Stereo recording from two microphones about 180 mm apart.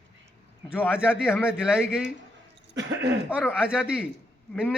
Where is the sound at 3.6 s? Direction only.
5° right (ahead or behind).